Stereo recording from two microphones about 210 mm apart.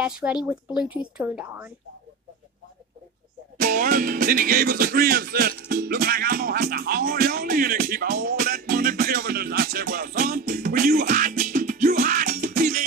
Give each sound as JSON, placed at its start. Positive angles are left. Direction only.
{"t": 0.0, "sound": "a woman's voice", "side_deg": -5}
{"t": 3.5, "sound": "music", "side_deg": -40}